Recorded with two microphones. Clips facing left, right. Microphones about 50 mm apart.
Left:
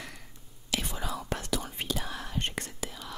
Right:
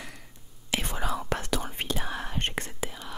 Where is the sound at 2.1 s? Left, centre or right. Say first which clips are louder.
Right 3 dB; right.